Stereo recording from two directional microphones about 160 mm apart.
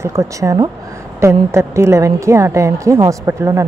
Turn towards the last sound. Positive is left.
turn(degrees=-20)  # may be behind; listen again after turning